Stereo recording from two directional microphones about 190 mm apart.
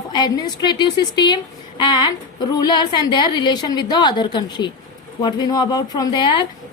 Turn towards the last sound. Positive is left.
turn(degrees=20)  # may be behind; listen again after turning